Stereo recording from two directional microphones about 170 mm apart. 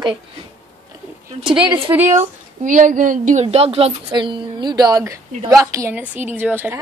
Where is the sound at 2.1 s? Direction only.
45° right (ahead or behind).